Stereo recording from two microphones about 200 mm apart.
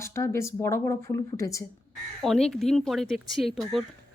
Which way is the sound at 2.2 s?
Centre (ahead or behind).